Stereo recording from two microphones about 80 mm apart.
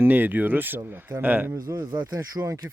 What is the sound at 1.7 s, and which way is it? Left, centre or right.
Speech, right.